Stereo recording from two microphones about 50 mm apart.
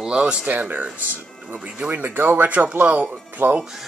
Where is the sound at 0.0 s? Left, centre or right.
Centre.